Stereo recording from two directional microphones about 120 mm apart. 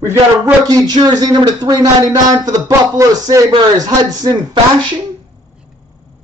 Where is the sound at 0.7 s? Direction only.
35° right (ahead or behind).